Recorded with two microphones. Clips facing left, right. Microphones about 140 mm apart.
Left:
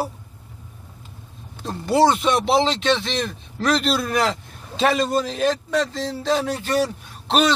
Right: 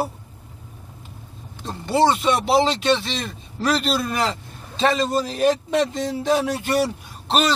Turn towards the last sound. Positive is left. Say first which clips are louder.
# left 2 dB
turn(degrees=0)  # may be behind; listen again after turning